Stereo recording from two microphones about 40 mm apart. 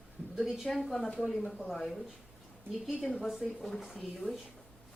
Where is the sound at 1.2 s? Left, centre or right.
Centre.